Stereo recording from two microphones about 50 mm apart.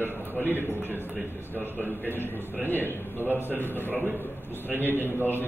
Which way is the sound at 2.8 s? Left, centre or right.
Right.